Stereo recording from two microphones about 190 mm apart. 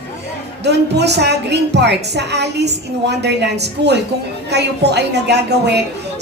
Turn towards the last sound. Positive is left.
turn(degrees=-60)  # may be behind; listen again after turning